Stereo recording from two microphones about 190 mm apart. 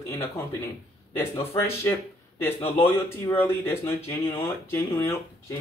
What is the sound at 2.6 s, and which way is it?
Speech, 30° left (ahead or behind).